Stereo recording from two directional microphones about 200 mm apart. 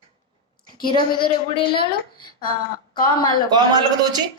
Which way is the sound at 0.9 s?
25° left (ahead or behind).